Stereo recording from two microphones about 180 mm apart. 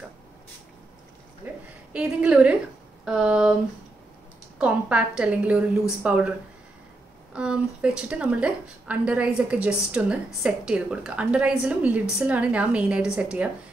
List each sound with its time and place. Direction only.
1.4 s a sound: 5° right (ahead or behind)
3.1 s speech: 5° right (ahead or behind)
4.6 s a woman's voice: 5° right (ahead or behind)
7.3 s a woman's voice: 5° right (ahead or behind)